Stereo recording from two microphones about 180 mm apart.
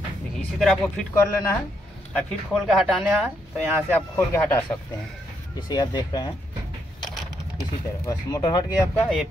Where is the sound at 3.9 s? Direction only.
10° left (ahead or behind).